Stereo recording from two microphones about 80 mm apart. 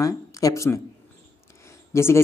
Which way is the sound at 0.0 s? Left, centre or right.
Left.